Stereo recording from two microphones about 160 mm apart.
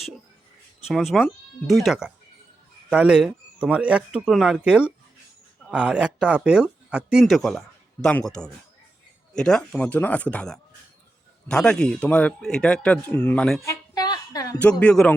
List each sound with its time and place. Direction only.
0.9 s speech: centre (ahead or behind)
13.7 s a sound: 25° left (ahead or behind)
14.6 s speech: 5° left (ahead or behind)